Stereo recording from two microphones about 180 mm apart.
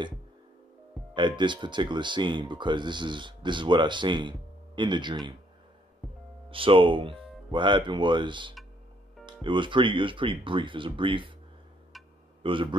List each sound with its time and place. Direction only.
1.1 s speech: 25° right (ahead or behind)
6.5 s speech: 30° right (ahead or behind)
12.4 s speech: 30° right (ahead or behind)